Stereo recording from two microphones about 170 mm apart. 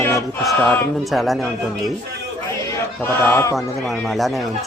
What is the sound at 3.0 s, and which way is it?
Choir, 10° left (ahead or behind).